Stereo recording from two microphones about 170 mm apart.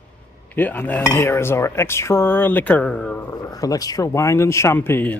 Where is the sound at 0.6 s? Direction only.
10° left (ahead or behind).